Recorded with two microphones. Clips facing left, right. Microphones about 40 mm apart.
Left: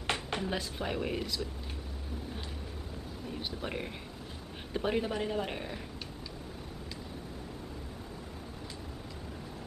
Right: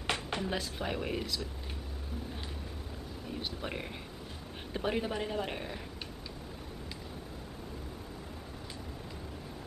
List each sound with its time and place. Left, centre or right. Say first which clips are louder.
0.0 s speech: left 1 dB; centre
3.3 s speech: even; centre